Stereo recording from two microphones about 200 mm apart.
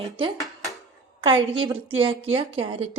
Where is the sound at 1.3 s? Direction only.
25° right (ahead or behind).